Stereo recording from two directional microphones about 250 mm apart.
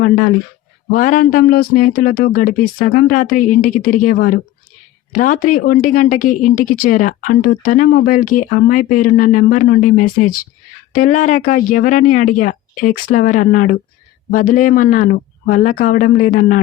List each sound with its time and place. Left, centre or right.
0.9 s a woman's voice: left